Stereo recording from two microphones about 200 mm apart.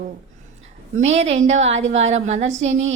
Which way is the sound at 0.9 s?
35° right (ahead or behind).